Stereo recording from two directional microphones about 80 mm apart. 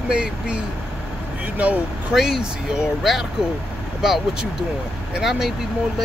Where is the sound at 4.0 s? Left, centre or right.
Centre.